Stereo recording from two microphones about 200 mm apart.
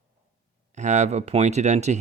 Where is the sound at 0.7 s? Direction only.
35° right (ahead or behind).